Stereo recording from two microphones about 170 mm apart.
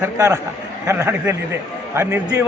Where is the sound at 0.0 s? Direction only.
20° right (ahead or behind).